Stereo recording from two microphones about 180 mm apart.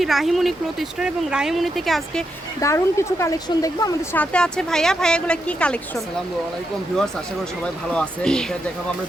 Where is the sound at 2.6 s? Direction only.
15° left (ahead or behind).